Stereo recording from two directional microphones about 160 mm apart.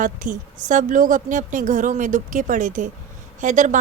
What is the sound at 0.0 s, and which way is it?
Speech, 55° right (ahead or behind).